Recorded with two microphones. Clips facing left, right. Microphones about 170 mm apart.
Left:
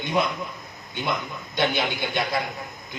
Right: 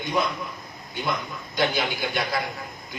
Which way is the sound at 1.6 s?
25° left (ahead or behind).